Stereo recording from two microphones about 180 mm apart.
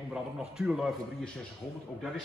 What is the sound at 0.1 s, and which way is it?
A man's voice, 5° right (ahead or behind).